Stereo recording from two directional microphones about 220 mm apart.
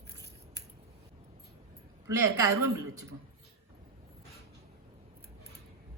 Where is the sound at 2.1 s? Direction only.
15° right (ahead or behind).